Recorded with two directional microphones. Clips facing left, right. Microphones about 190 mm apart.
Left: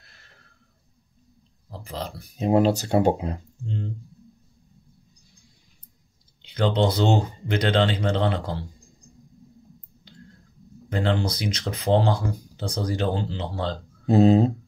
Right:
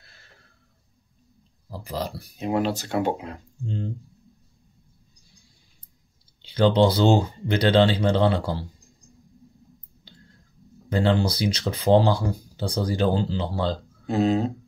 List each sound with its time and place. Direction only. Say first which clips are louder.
1.7 s speech: right 3 dB; 40° right (ahead or behind)
2.3 s speech: left 5 dB; 35° left (ahead or behind)
6.4 s speech: right 4 dB; 35° right (ahead or behind)
10.9 s speech: right 3 dB; 35° right (ahead or behind)
14.0 s speech: left 5 dB; 35° left (ahead or behind)